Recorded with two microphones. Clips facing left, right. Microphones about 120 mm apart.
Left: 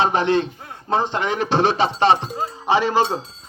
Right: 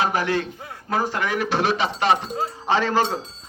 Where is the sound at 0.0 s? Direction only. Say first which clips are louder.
Left 4 dB; 25° left (ahead or behind).